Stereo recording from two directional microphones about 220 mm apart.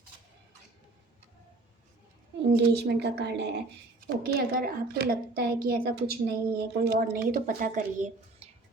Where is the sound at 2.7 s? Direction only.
50° right (ahead or behind).